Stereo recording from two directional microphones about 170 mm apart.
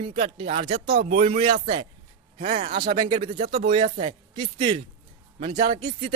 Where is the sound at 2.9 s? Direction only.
25° right (ahead or behind).